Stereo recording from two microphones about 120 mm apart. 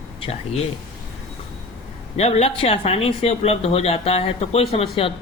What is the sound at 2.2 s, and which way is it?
Speech, 65° left (ahead or behind).